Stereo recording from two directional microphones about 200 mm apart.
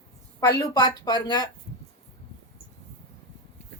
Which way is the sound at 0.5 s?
20° left (ahead or behind).